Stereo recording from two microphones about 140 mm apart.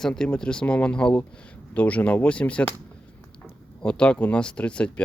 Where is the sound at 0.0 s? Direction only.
5° left (ahead or behind).